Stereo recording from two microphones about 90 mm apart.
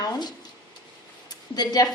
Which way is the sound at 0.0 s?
50° left (ahead or behind).